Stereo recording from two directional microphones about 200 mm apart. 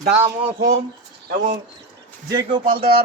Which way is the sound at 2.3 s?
25° right (ahead or behind).